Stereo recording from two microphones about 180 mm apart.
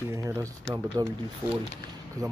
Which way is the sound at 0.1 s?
15° right (ahead or behind).